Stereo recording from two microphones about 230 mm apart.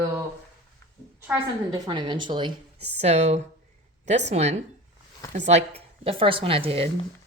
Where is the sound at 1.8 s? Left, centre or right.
Centre.